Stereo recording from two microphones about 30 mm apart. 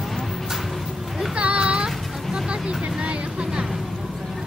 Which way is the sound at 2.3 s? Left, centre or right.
Right.